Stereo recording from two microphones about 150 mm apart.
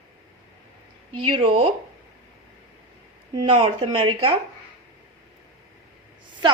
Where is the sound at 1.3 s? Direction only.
35° right (ahead or behind).